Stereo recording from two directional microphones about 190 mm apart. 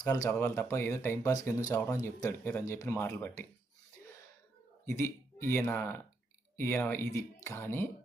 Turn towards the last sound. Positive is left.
turn(degrees=10)  # may be behind; listen again after turning